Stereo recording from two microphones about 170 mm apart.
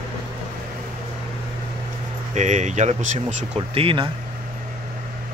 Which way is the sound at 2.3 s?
45° right (ahead or behind).